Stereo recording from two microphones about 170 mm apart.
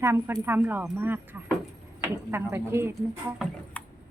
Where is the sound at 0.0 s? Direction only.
15° right (ahead or behind).